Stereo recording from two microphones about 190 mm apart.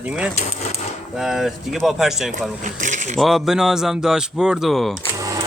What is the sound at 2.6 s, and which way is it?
Speech, 40° right (ahead or behind).